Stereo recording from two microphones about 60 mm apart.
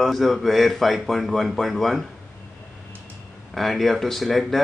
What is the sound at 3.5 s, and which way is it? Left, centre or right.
Music, centre.